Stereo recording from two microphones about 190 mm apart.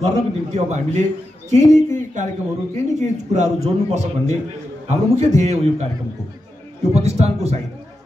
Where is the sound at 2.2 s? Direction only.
40° right (ahead or behind).